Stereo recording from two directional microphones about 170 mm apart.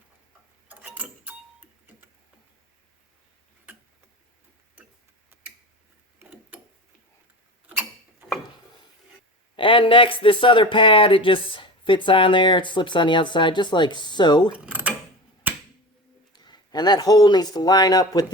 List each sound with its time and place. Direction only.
0.7 s clock: 10° right (ahead or behind)
6.1 s mechanisms: 10° right (ahead or behind)
9.6 s speech: 30° left (ahead or behind)
14.5 s a sound: 10° right (ahead or behind)
16.3 s speech: 25° left (ahead or behind)